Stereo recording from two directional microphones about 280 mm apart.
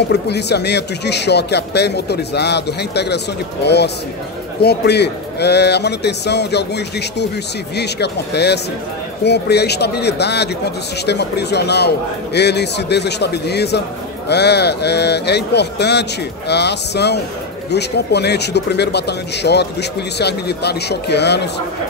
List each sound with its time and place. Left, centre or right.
0.1 s speech: left